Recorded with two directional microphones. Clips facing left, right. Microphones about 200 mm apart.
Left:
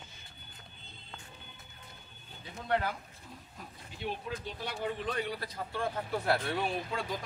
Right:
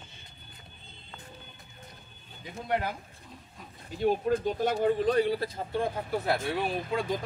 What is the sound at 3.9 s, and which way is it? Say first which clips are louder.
Speech: right 12 dB; 45° right (ahead or behind).